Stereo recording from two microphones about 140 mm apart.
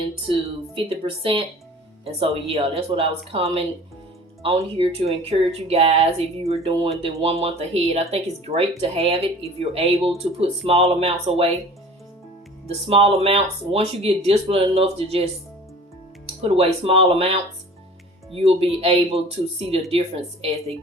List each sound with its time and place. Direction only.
0.8 s a woman's voice: 40° right (ahead or behind)
12.6 s speech: 45° right (ahead or behind)